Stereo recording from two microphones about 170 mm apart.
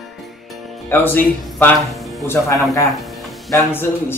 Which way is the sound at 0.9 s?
10° left (ahead or behind).